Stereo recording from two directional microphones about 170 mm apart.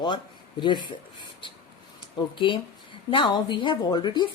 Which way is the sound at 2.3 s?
30° left (ahead or behind).